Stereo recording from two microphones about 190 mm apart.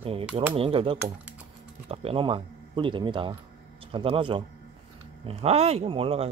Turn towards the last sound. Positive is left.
turn(degrees=-30)  # may be behind; listen again after turning